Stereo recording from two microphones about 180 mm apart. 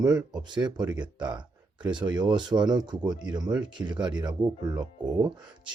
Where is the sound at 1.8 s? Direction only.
25° right (ahead or behind).